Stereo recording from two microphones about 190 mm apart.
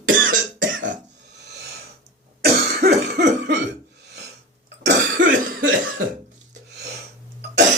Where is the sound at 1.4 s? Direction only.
60° right (ahead or behind).